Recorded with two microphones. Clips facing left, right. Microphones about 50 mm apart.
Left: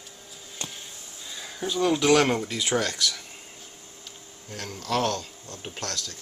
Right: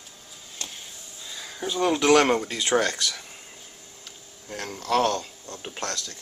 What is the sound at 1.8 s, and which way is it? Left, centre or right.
Speech, centre.